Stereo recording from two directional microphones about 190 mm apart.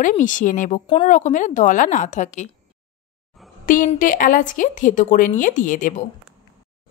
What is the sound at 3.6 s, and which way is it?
Speech, 45° left (ahead or behind).